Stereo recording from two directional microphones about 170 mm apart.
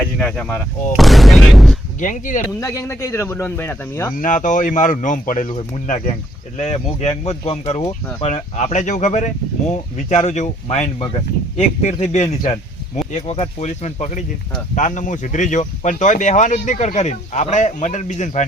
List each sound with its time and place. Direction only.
0.0 s speech: 5° left (ahead or behind)
2.0 s speech: 50° left (ahead or behind)
2.6 s speech: 15° left (ahead or behind)
4.2 s speech: 50° left (ahead or behind)
6.6 s speech: 40° left (ahead or behind)